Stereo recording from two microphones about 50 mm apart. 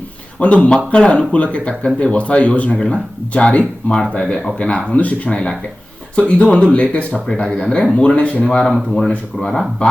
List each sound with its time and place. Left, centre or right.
0.3 s speech: left
8.4 s speech: centre